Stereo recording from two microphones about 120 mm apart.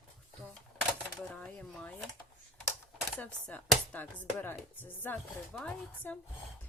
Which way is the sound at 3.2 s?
15° left (ahead or behind).